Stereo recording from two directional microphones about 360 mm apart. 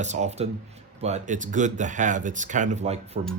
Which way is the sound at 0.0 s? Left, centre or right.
Centre.